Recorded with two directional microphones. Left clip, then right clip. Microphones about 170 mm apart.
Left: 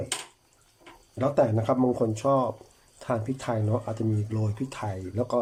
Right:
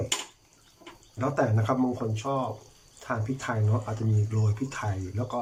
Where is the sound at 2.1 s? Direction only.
35° left (ahead or behind).